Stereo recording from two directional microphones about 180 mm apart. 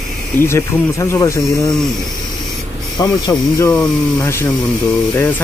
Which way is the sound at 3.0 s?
20° left (ahead or behind).